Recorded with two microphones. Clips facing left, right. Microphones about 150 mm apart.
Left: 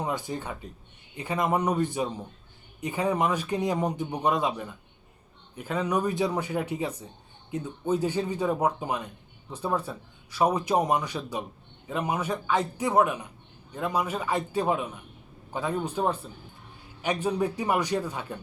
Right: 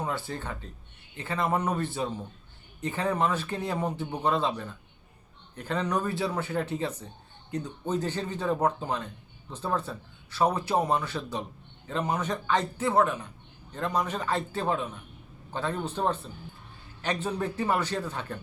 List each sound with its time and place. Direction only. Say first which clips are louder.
0.0 s speech: left 2 dB; 15° left (ahead or behind)